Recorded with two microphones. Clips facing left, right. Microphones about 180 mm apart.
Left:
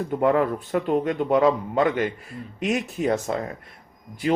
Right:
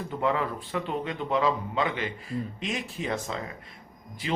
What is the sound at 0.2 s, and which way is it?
Speech, 50° left (ahead or behind).